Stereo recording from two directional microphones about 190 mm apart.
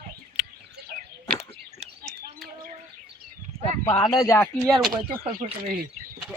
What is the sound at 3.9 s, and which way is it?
Speech, 20° left (ahead or behind).